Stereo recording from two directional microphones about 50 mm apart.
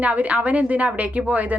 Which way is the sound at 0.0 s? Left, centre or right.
Right.